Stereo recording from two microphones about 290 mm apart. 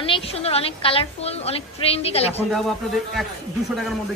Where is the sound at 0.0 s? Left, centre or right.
Centre.